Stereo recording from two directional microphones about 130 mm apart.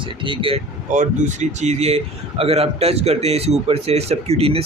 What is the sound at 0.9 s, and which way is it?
Speech, 60° right (ahead or behind).